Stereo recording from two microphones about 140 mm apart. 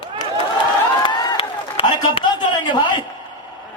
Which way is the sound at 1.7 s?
40° left (ahead or behind).